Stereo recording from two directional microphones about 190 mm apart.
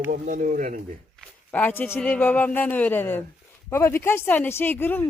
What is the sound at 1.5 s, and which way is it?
Speech, 10° left (ahead or behind).